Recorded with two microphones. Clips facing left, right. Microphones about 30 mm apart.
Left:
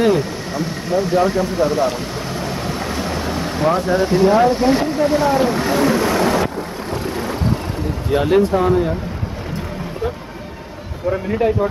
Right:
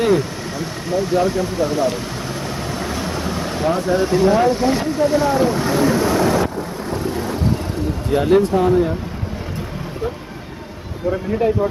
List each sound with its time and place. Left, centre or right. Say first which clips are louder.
0.0 s vehicle: left 1 dB; centre
3.6 s speech: left 2 dB; left
5.8 s vehicle: even; left
8.1 s speech: even; centre